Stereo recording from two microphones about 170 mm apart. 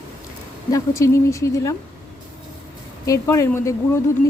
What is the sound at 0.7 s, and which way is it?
Speech, 15° left (ahead or behind).